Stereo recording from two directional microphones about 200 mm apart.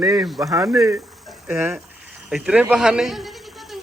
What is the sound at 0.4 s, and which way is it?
A man's voice, 15° right (ahead or behind).